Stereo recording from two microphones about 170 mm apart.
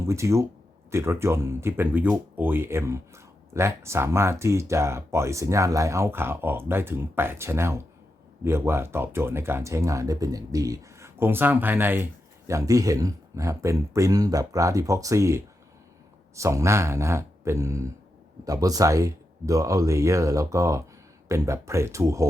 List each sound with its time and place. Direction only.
0.0 s speech: 15° right (ahead or behind)